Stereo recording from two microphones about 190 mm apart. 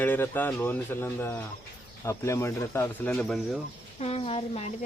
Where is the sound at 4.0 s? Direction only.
30° left (ahead or behind).